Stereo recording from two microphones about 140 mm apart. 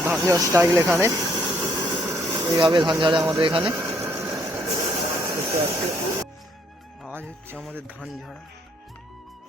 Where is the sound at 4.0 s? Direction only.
20° right (ahead or behind).